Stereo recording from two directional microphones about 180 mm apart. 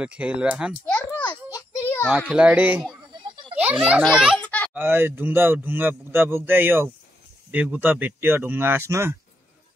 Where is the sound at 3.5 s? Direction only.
10° right (ahead or behind).